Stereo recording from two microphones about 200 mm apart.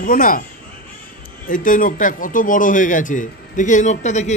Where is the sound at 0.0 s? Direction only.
45° left (ahead or behind).